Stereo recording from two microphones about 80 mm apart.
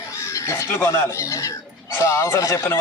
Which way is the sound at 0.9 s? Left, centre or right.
Left.